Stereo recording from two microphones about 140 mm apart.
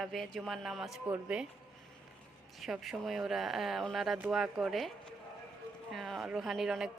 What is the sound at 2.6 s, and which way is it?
A woman's voice, centre (ahead or behind).